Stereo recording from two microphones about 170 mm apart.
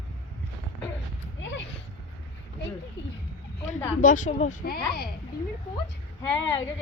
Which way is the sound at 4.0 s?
50° left (ahead or behind).